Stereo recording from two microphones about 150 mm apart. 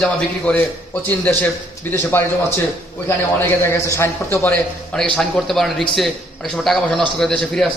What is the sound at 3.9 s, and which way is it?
A man's voice, 15° left (ahead or behind).